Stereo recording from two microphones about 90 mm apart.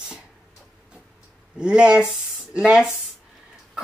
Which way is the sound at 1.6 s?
10° right (ahead or behind).